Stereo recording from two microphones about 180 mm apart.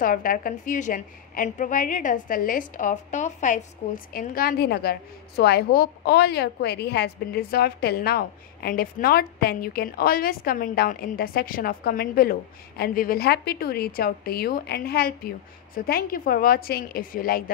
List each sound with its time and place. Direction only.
0.0 s a woman's voice: 50° left (ahead or behind)